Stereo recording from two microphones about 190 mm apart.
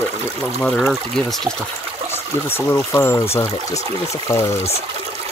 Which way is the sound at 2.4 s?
10° left (ahead or behind).